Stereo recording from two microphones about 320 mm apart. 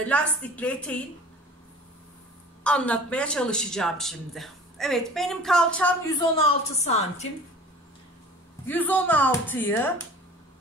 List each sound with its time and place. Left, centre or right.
0.1 s speech: centre
2.6 s speech: centre
6.8 s a woman's voice: centre
8.6 s speech: centre